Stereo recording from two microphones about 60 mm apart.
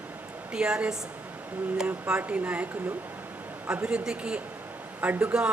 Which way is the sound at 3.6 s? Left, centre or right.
Centre.